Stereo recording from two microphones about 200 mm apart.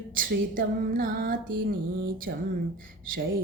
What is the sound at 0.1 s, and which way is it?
Music, 45° right (ahead or behind).